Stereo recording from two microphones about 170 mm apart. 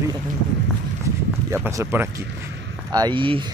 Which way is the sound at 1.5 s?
15° right (ahead or behind).